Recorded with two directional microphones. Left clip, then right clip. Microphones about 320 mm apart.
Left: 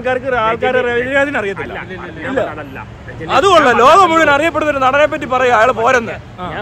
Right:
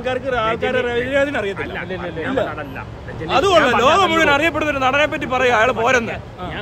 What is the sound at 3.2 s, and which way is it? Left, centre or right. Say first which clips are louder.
Speech: left 5 dB; centre.